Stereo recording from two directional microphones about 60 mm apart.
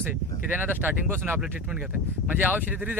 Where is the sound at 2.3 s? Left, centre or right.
Right.